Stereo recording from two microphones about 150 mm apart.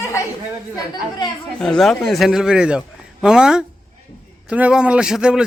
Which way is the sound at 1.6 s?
5° left (ahead or behind).